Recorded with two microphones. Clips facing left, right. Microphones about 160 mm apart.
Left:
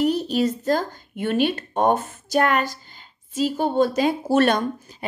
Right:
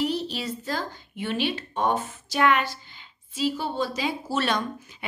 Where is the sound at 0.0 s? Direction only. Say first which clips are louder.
Left 7 dB; 50° left (ahead or behind).